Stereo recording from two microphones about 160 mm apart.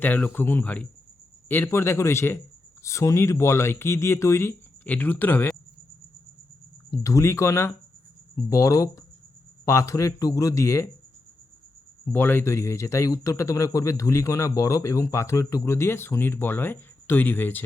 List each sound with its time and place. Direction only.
0.0 s speech: 10° left (ahead or behind)
6.9 s a man's voice: 20° left (ahead or behind)
12.0 s speech: 10° left (ahead or behind)